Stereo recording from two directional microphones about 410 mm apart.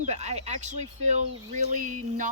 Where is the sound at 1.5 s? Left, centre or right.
Centre.